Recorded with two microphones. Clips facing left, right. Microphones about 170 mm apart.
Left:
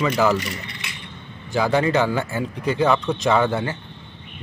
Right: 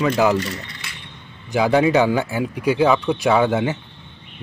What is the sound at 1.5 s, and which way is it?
Speech, 10° right (ahead or behind).